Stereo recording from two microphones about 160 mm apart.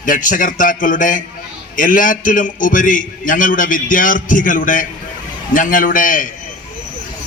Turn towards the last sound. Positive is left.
turn(degrees=55)  # may be behind; listen again after turning